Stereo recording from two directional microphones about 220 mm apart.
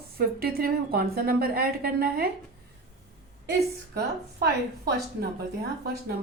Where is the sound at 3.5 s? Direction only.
50° right (ahead or behind).